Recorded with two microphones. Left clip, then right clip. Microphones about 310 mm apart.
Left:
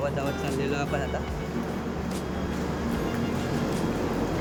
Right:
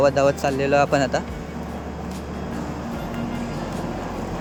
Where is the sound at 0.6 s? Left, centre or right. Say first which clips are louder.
Right 13 dB; centre.